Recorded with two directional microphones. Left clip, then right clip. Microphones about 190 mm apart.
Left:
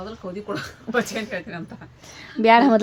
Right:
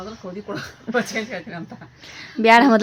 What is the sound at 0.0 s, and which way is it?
Speech, 15° left (ahead or behind).